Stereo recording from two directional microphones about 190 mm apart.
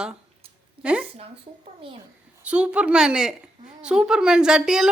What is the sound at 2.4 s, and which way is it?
A woman's voice, 5° right (ahead or behind).